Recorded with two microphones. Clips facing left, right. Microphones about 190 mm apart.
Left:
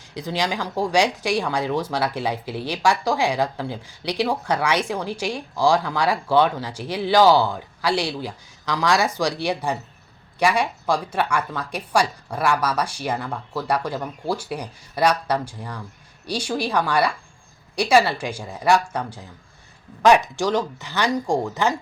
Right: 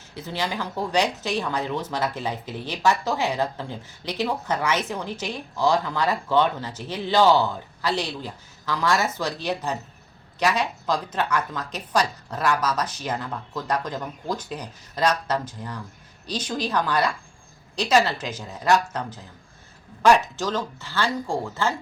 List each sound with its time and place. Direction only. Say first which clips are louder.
0.1 s speech: left 4 dB; 15° left (ahead or behind)